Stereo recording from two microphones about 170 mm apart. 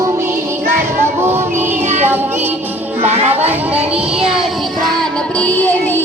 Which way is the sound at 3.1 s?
40° right (ahead or behind).